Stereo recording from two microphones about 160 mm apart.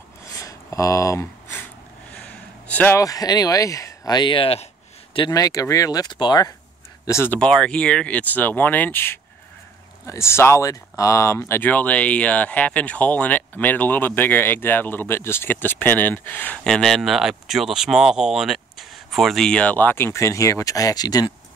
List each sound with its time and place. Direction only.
0.4 s a sound: 20° left (ahead or behind)
2.1 s speech: 10° left (ahead or behind); by 6.5 s 25° left (ahead or behind)
7.1 s speech: 15° left (ahead or behind)